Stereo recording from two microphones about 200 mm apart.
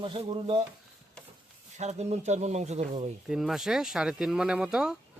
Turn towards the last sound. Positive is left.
turn(degrees=-5)  # may be behind; listen again after turning